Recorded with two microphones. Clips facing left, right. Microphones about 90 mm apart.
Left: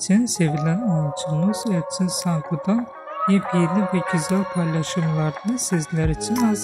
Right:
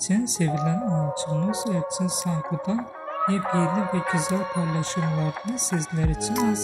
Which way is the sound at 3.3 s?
70° left (ahead or behind).